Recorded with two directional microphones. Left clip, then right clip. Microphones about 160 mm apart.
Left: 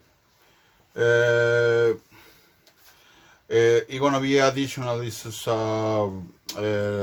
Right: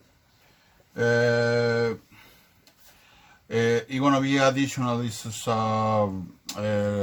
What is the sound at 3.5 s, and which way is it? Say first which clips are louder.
Speech: left 5 dB; 45° left (ahead or behind).